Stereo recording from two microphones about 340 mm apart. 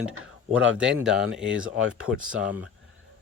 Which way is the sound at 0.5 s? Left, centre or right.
Centre.